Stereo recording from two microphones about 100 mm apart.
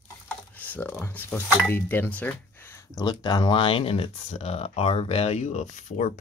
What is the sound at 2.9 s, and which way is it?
Speech, 45° left (ahead or behind).